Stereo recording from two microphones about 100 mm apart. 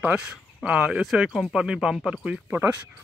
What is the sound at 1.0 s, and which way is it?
Speech, centre (ahead or behind).